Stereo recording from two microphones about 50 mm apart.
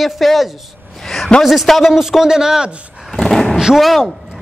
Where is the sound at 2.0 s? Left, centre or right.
Centre.